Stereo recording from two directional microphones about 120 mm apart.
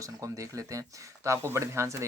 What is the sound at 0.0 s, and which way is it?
Speech, 25° right (ahead or behind).